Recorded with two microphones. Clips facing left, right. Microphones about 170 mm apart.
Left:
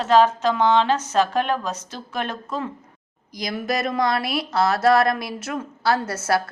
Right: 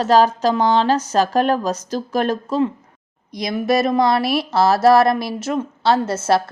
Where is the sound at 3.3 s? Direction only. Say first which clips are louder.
Right 7 dB; 25° right (ahead or behind).